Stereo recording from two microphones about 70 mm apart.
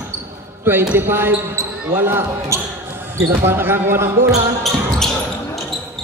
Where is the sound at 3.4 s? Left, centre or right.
Right.